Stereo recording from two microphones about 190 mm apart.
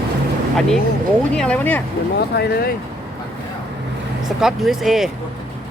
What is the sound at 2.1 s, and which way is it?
Speech, 60° left (ahead or behind).